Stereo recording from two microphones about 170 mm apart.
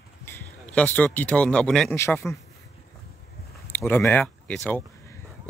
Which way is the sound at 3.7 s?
10° left (ahead or behind).